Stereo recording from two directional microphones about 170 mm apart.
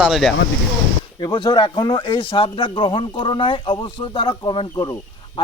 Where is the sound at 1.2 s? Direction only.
25° left (ahead or behind).